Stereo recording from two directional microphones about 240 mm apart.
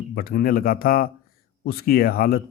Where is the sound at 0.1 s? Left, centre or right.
Left.